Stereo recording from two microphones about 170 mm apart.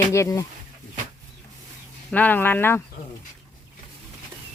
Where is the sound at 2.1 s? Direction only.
10° left (ahead or behind).